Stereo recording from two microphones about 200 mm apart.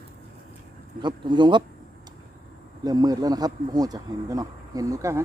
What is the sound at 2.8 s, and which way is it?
Speech, 20° right (ahead or behind).